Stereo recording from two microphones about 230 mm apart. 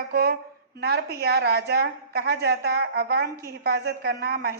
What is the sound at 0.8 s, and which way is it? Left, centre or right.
A woman's voice, right.